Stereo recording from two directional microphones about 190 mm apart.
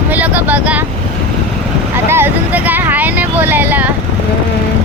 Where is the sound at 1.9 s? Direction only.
10° right (ahead or behind).